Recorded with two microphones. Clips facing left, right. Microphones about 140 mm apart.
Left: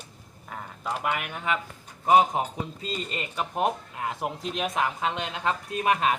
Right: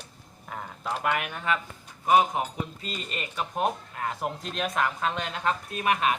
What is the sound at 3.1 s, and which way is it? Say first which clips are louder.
Speech: left 1 dB; 20° left (ahead or behind).